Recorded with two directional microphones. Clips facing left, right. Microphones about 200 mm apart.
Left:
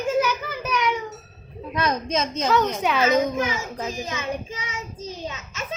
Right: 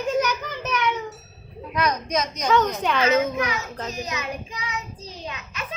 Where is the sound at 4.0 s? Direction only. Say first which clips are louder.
Left 2 dB; 25° left (ahead or behind).